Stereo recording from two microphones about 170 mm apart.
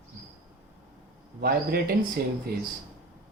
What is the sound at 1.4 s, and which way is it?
Speech, 65° right (ahead or behind).